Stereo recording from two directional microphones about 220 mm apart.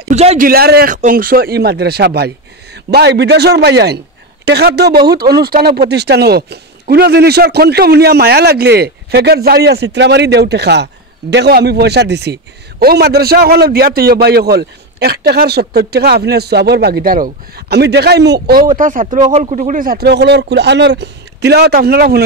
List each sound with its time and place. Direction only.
0.1 s speech: 30° right (ahead or behind)
0.5 s speech: 45° right (ahead or behind)